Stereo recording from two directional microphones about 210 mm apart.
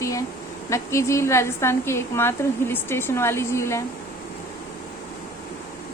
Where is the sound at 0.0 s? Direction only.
15° left (ahead or behind).